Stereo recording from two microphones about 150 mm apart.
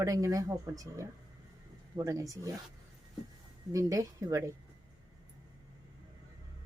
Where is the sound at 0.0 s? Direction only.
20° right (ahead or behind).